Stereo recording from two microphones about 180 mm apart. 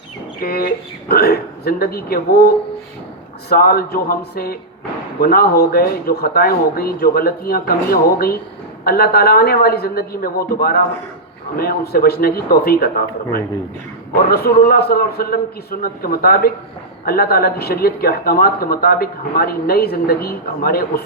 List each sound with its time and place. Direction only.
0.4 s speech: 60° left (ahead or behind)
3.5 s speech: 60° left (ahead or behind)
14.3 s speech: 60° left (ahead or behind)